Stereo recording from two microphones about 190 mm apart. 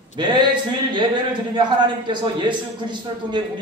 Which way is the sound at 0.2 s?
25° right (ahead or behind).